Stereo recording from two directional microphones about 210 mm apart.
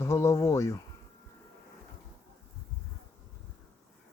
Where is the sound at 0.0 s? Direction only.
15° left (ahead or behind).